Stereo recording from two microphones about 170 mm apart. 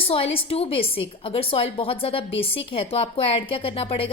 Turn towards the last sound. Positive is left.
turn(degrees=30)  # may be behind; listen again after turning